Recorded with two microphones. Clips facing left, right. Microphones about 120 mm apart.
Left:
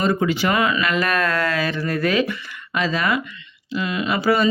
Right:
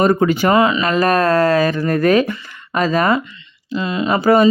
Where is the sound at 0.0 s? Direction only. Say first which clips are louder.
Right 6 dB; 45° right (ahead or behind).